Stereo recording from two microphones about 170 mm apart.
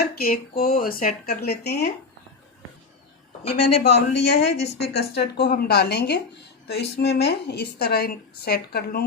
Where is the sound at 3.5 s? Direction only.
35° left (ahead or behind).